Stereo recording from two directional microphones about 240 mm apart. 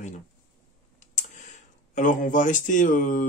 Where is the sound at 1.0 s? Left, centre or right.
Left.